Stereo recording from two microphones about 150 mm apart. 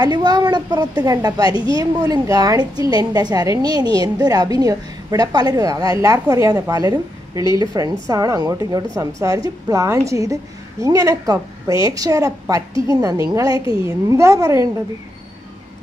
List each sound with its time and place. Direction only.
0.0 s a woman's voice: 30° right (ahead or behind)